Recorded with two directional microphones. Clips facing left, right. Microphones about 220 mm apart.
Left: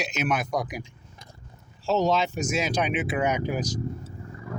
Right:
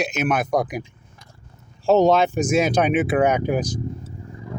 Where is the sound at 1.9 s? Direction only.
55° right (ahead or behind).